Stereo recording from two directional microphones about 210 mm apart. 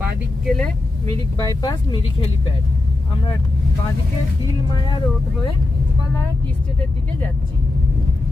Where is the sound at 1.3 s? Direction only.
15° left (ahead or behind).